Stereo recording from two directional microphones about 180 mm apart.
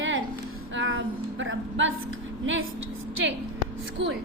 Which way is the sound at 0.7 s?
90° right.